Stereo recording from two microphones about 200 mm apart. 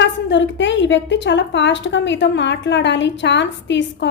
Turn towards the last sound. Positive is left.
turn(degrees=65)  # may be behind; listen again after turning